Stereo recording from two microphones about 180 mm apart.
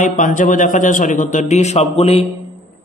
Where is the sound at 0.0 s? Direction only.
45° left (ahead or behind).